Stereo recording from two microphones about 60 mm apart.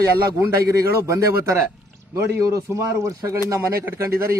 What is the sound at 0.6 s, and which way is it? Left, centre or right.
Speech, right.